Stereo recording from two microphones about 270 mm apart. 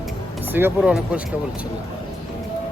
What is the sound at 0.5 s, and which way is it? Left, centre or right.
Speech, centre.